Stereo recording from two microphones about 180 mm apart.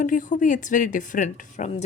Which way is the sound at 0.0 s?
45° left (ahead or behind).